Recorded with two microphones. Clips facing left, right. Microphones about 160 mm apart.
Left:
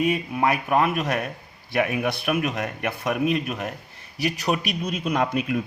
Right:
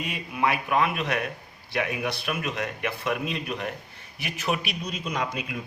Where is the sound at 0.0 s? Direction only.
45° left (ahead or behind).